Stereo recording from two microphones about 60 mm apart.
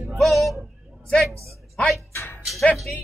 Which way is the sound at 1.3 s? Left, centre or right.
Right.